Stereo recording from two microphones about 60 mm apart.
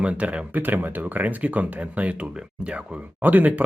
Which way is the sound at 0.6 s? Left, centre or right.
Right.